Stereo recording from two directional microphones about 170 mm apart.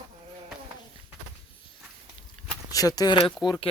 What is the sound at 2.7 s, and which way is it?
Speech, 20° left (ahead or behind).